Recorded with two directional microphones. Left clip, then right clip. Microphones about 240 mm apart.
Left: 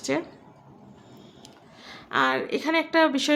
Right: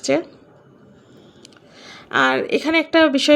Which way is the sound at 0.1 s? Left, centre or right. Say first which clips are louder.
Right 8 dB; centre.